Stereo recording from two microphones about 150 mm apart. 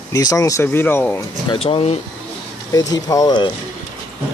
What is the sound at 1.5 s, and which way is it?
Speech, 40° left (ahead or behind).